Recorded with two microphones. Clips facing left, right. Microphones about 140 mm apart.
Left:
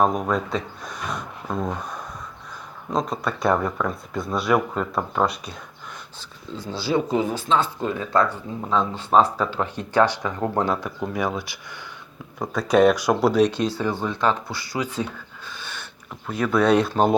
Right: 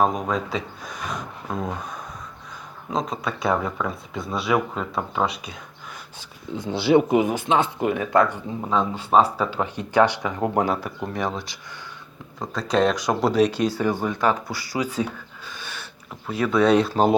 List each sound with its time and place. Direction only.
0.0 s speech: centre (ahead or behind)
2.9 s speech: centre (ahead or behind)
6.5 s speech: 20° right (ahead or behind)
15.4 s a sound: 15° right (ahead or behind)
16.2 s speech: 5° right (ahead or behind)